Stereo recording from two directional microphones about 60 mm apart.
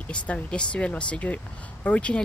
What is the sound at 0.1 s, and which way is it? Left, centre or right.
Speech, centre.